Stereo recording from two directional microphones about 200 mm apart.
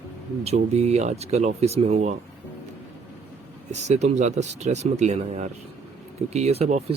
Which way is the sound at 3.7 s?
35° right (ahead or behind).